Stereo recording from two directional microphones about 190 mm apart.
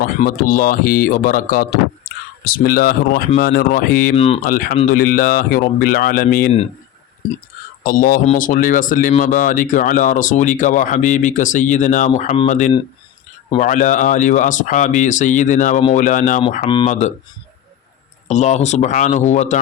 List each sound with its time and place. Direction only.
0.0 s speech: 50° left (ahead or behind)
2.1 s whispering: 50° left (ahead or behind)
2.4 s speech: 50° left (ahead or behind)
4.1 s speech: 30° left (ahead or behind)
4.4 s speech: 50° left (ahead or behind)
7.9 s speech: 45° left (ahead or behind)
18.3 s speech: 40° left (ahead or behind)